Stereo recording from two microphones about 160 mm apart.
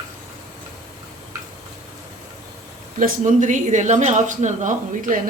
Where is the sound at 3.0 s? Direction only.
55° right (ahead or behind).